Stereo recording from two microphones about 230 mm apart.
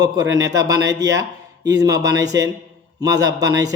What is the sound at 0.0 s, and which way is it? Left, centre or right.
A man's voice, centre.